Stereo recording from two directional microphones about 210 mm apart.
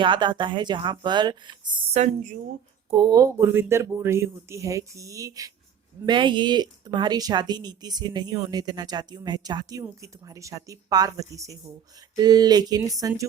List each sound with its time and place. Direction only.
0.0 s speech: 20° right (ahead or behind)